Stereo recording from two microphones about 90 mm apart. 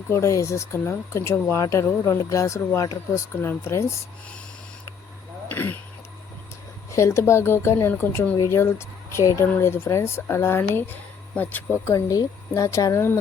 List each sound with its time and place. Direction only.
0.1 s speech: 35° left (ahead or behind)
5.5 s vehicle: 20° left (ahead or behind)
6.9 s speech: 30° left (ahead or behind)
11.9 s speech: 35° left (ahead or behind)